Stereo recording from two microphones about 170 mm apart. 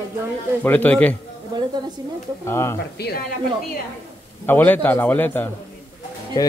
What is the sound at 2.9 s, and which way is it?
Speech, 70° left (ahead or behind).